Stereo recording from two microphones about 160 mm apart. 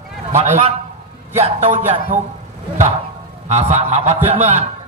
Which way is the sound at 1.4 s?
45° right (ahead or behind).